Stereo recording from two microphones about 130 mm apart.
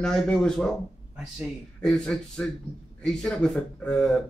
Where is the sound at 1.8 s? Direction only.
5° left (ahead or behind).